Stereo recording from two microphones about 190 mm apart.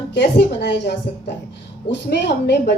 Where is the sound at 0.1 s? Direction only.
65° left (ahead or behind).